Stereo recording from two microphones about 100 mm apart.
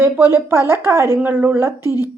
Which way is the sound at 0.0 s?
25° right (ahead or behind).